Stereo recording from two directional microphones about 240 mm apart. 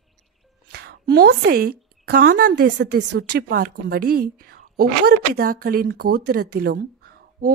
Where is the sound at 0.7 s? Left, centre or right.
Right.